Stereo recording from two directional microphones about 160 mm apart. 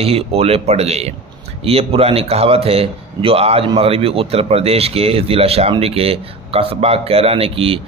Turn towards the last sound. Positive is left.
turn(degrees=-35)  # may be behind; listen again after turning